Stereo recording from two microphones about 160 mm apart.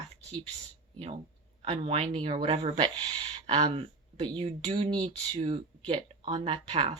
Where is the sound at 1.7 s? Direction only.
40° right (ahead or behind).